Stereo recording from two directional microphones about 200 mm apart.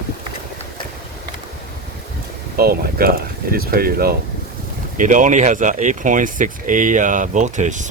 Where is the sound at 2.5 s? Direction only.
50° right (ahead or behind).